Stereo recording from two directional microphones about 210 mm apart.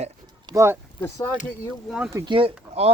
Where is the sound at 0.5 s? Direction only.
10° right (ahead or behind).